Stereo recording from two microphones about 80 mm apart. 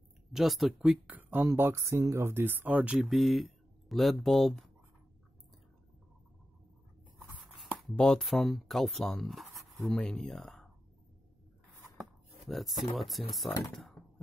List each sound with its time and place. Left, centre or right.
0.3 s speech: centre
0.7 s speech: centre
1.4 s speech: right; by 3.1 s centre
3.1 s speech: centre
7.9 s speech: centre
12.0 s speech: centre